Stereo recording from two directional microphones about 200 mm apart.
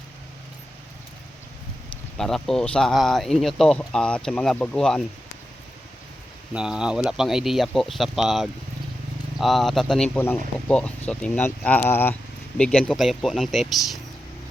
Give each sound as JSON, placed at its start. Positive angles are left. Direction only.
{"t": 2.1, "sound": "speech", "side_deg": 0}
{"t": 6.5, "sound": "speech", "side_deg": -5}